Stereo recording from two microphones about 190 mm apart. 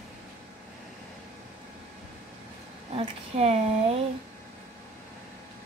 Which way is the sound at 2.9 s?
35° right (ahead or behind).